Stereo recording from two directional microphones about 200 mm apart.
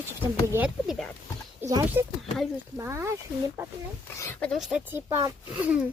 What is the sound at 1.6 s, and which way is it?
Speech, 15° right (ahead or behind).